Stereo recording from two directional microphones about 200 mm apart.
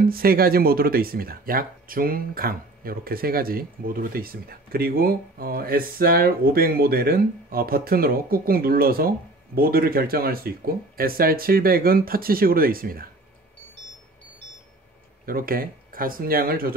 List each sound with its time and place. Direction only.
0.1 s speech: 50° right (ahead or behind)
15.2 s speech: 45° right (ahead or behind)